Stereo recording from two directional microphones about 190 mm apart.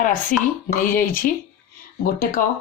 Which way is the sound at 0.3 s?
45° left (ahead or behind).